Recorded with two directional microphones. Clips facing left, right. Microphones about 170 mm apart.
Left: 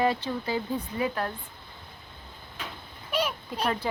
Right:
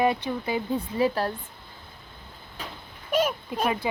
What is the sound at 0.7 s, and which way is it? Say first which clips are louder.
Speech: right 5 dB; 35° right (ahead or behind).